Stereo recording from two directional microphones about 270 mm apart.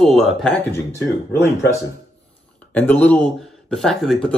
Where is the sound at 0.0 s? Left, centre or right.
Centre.